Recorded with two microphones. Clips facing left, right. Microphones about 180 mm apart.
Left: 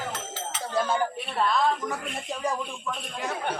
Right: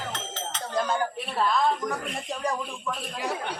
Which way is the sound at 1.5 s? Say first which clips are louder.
Right 1 dB; centre (ahead or behind).